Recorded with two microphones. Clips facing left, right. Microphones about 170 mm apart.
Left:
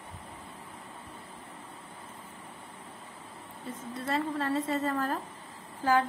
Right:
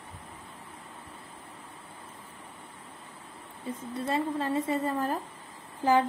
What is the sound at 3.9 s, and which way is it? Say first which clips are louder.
A woman's voice: right 2 dB; 25° right (ahead or behind).